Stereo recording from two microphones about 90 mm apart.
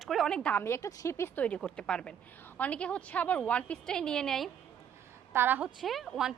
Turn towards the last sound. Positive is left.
turn(degrees=0)  # may be behind; listen again after turning